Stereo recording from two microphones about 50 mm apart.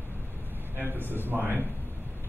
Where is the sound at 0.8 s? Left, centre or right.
Right.